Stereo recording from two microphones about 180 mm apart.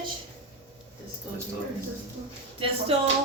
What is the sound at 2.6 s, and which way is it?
Speech, 35° right (ahead or behind).